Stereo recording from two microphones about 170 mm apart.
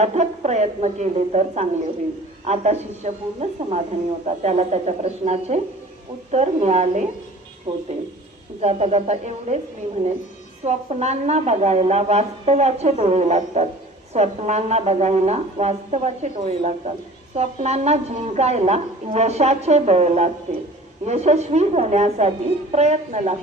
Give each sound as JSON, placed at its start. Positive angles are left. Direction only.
{"t": 0.0, "sound": "a woman's voice", "side_deg": -40}
{"t": 10.6, "sound": "a woman's voice", "side_deg": -40}